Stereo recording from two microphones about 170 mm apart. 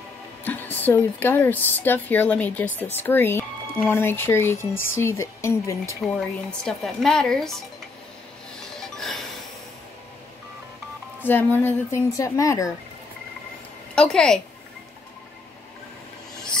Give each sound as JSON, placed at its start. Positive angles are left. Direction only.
{"t": 0.4, "sound": "speech", "side_deg": 10}
{"t": 6.6, "sound": "a woman's voice", "side_deg": 0}
{"t": 8.9, "sound": "music", "side_deg": 0}
{"t": 11.2, "sound": "speech", "side_deg": 10}
{"t": 13.9, "sound": "a woman's voice", "side_deg": 5}